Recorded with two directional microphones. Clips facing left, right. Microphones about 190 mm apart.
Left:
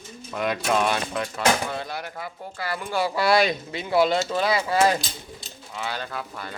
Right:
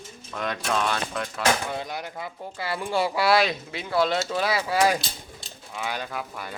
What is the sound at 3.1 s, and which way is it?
Speech, 5° right (ahead or behind).